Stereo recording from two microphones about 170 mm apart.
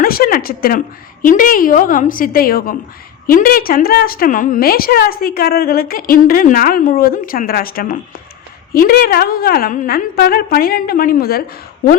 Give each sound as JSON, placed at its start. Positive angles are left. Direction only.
{"t": 0.0, "sound": "a woman's voice", "side_deg": 60}